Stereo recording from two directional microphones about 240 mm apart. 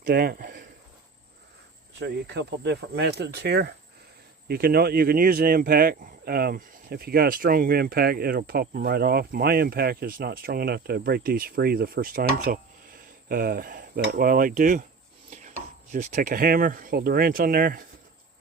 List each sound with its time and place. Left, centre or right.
0.0 s speech: right
2.0 s speech: right
15.3 s chopping: right
15.9 s speech: right